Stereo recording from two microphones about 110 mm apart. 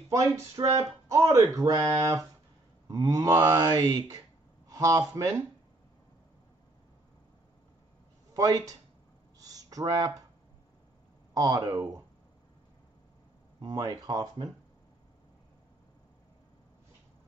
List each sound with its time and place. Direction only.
0.1 s a man's voice: 30° right (ahead or behind)
8.3 s speech: 35° right (ahead or behind)
9.4 s a sound: 35° right (ahead or behind)
11.3 s speech: 35° right (ahead or behind)
13.6 s speech: 40° right (ahead or behind)